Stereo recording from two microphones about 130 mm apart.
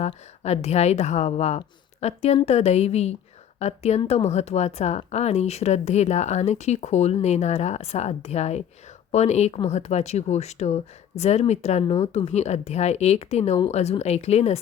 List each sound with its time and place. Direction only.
0.0 s speech: 55° left (ahead or behind)
11.9 s speech: 45° left (ahead or behind)